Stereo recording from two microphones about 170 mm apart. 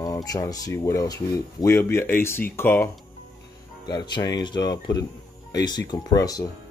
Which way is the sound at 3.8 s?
25° left (ahead or behind).